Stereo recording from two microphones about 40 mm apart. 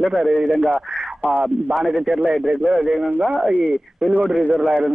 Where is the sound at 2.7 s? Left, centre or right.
Right.